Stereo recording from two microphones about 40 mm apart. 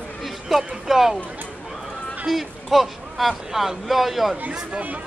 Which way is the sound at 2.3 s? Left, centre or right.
Centre.